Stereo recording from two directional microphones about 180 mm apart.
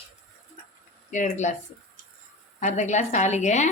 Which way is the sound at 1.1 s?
40° left (ahead or behind).